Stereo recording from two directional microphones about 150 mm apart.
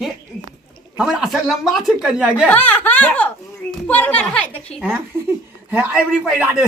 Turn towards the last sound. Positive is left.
turn(degrees=-10)  # may be behind; listen again after turning